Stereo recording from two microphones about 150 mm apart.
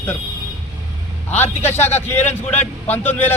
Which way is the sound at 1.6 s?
15° left (ahead or behind).